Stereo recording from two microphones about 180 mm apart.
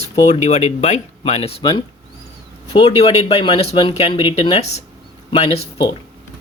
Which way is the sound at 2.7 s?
30° left (ahead or behind).